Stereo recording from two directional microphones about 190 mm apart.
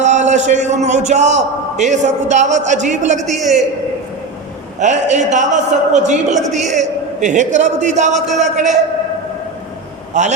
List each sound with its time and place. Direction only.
0.0 s a man's voice: 40° right (ahead or behind)
4.8 s a man's voice: 40° right (ahead or behind)
10.1 s a man's voice: 40° right (ahead or behind)